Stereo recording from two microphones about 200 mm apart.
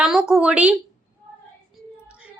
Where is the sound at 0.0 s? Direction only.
5° right (ahead or behind).